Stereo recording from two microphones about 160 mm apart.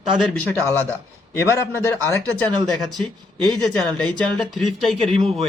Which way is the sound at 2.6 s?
Centre (ahead or behind).